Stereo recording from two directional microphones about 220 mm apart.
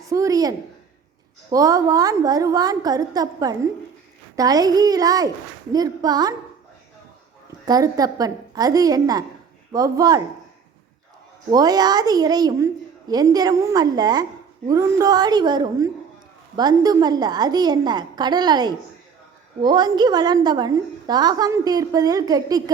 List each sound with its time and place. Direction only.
0.0 s a woman's voice: 15° right (ahead or behind)
7.6 s a woman's voice: 15° right (ahead or behind)
11.5 s a woman's voice: 15° right (ahead or behind)